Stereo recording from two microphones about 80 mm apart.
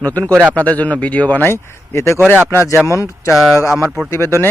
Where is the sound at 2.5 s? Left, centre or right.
Left.